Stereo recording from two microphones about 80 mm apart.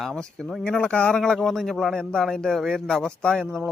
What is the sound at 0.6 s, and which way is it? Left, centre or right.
Speech, centre.